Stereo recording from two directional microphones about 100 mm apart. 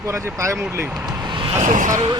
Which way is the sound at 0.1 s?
30° right (ahead or behind).